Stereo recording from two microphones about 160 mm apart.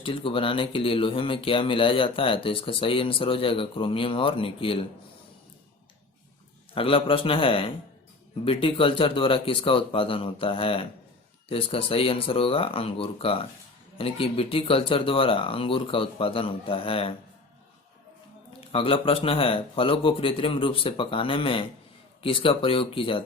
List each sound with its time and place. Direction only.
0.0 s speech: 35° left (ahead or behind)
6.7 s speech: 35° left (ahead or behind)
18.7 s speech: 35° left (ahead or behind)